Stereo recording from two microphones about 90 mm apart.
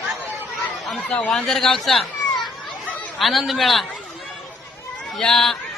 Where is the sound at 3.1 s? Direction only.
Centre (ahead or behind).